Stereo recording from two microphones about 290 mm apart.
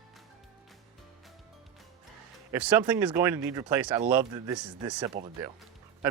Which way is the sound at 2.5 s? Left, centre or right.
Centre.